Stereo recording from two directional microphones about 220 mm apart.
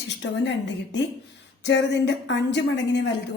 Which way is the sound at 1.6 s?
55° left (ahead or behind).